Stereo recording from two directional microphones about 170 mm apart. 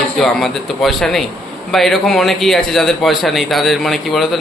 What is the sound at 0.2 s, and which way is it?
A man's voice, centre (ahead or behind).